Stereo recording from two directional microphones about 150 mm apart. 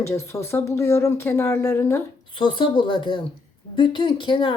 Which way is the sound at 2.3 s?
30° left (ahead or behind).